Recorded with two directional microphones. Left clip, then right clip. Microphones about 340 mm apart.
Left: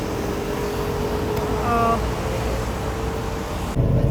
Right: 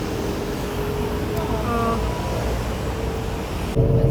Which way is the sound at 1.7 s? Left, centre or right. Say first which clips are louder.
Left 4 dB; centre.